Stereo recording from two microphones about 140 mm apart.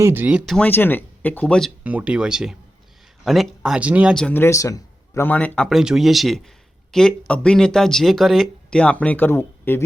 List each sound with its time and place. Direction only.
0.0 s speech: 15° right (ahead or behind)
0.5 s speech: 10° left (ahead or behind)
1.8 s speech: 10° right (ahead or behind)
4.1 s speech: 10° left (ahead or behind)
5.6 s speech: 5° right (ahead or behind); by 9.8 s 15° left (ahead or behind)